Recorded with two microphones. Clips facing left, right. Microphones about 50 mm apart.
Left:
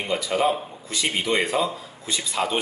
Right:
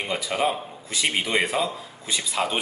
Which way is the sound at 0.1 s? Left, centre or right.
Centre.